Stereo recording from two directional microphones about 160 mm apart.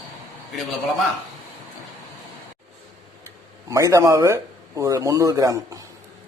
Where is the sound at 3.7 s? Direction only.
20° right (ahead or behind).